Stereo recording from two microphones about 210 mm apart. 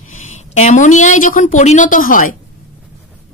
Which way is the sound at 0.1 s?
35° left (ahead or behind).